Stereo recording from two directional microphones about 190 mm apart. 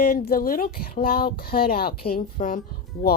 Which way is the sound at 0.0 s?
50° left (ahead or behind).